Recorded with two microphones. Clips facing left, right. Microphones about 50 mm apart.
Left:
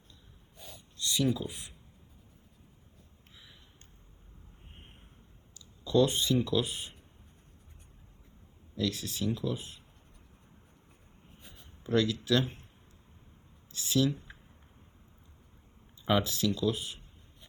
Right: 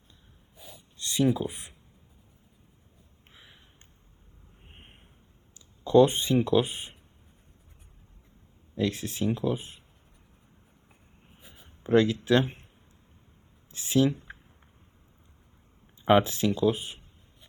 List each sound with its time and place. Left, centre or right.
0.5 s snort: centre
0.9 s a sound: right
1.3 s speech: right
3.3 s a sound: right
4.7 s a sound: right
5.5 s speech: right
8.7 s speech: right
10.8 s writing: centre
11.8 s speech: right
13.7 s speech: right
14.3 s a sound: right
16.0 s speech: right